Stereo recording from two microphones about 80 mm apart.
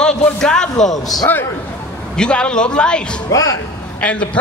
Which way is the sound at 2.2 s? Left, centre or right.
Centre.